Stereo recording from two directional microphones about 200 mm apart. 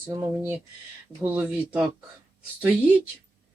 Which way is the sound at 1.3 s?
10° right (ahead or behind).